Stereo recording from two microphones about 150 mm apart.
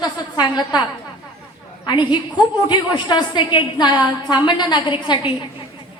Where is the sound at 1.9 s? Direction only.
30° left (ahead or behind).